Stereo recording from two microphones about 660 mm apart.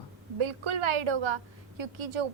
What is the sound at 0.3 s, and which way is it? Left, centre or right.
A woman's voice, right.